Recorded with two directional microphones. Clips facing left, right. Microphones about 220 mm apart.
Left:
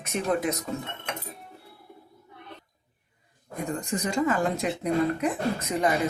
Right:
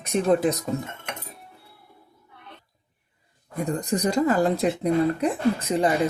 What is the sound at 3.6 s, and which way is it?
Speech, 35° right (ahead or behind).